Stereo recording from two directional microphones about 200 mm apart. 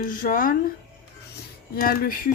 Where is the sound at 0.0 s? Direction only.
45° left (ahead or behind).